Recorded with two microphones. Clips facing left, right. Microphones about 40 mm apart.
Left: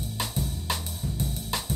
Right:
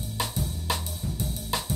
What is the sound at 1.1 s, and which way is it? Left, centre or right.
Music, left.